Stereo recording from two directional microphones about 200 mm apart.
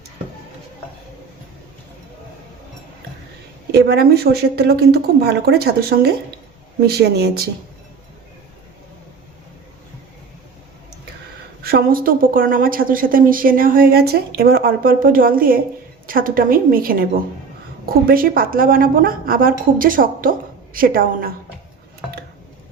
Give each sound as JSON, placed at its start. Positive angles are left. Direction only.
{"t": 3.7, "sound": "a woman's voice", "side_deg": -55}
{"t": 11.6, "sound": "a woman's voice", "side_deg": -45}